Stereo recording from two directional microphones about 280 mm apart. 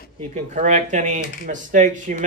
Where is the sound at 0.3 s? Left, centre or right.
Right.